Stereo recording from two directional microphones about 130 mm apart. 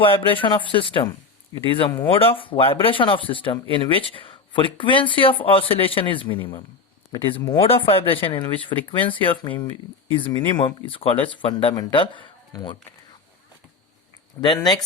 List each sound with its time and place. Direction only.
0.0 s speech: 45° left (ahead or behind)
14.6 s speech: 30° left (ahead or behind)